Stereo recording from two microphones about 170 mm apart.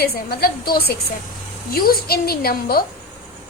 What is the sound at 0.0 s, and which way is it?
A woman's voice, 65° left (ahead or behind).